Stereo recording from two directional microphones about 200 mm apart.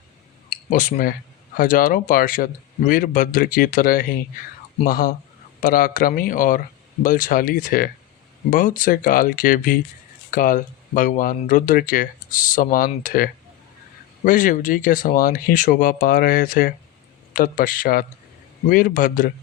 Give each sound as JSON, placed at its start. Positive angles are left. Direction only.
{"t": 0.7, "sound": "speech", "side_deg": 40}